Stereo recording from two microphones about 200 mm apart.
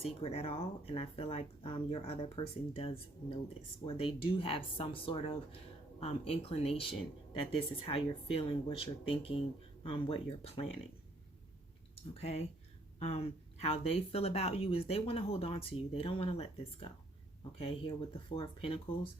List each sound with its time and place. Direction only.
0.0 s a woman's voice: 30° left (ahead or behind)
11.9 s a woman's voice: 30° left (ahead or behind)
17.6 s a woman's voice: 30° left (ahead or behind)